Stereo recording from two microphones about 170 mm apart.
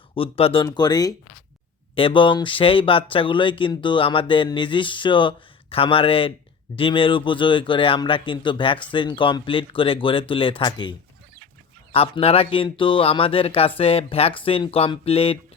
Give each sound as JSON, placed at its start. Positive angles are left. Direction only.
{"t": 0.1, "sound": "a man's voice", "side_deg": 35}